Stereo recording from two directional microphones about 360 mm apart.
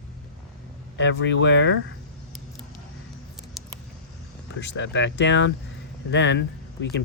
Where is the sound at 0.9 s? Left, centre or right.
Left.